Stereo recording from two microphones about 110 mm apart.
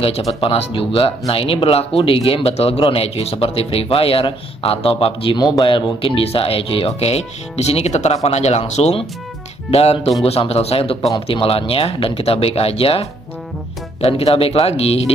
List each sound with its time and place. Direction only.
0.0 s speech: 65° left (ahead or behind)
2.8 s speech: 60° left (ahead or behind)
5.4 s speech: 45° left (ahead or behind); by 9.0 s 85° left
9.7 s speech: 70° left (ahead or behind)